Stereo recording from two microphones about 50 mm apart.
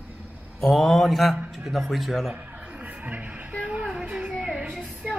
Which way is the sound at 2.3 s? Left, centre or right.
Right.